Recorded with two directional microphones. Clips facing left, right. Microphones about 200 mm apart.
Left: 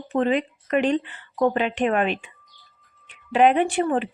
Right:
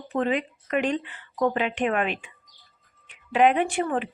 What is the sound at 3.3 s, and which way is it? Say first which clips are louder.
Speech: left 2 dB; 35° left (ahead or behind).